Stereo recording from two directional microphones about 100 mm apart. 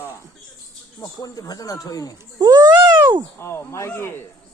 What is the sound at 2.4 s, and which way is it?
Baby cry, 45° right (ahead or behind).